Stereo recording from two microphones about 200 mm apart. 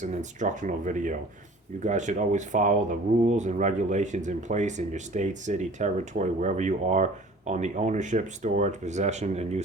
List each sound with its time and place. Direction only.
0.0 s speech: 35° right (ahead or behind)